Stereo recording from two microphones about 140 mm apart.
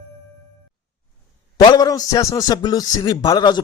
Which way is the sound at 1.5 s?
30° left (ahead or behind).